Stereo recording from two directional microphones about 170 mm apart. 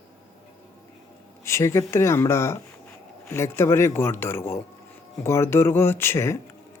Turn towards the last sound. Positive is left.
turn(degrees=15)  # may be behind; listen again after turning